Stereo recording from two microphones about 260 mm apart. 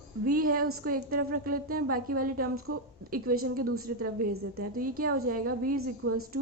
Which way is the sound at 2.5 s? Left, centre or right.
Right.